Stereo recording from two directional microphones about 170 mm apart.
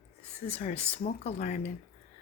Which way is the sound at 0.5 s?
45° left (ahead or behind).